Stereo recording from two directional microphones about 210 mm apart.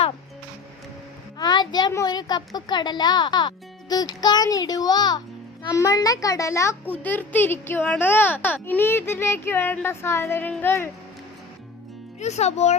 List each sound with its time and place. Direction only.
1.4 s a woman's voice: 20° left (ahead or behind)
12.2 s speech: 30° left (ahead or behind)